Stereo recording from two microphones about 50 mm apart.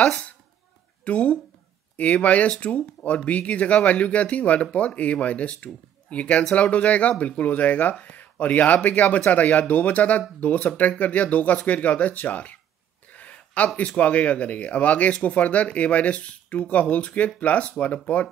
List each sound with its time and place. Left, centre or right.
1.0 s speech: left
13.1 s a sound: left
13.7 s speech: left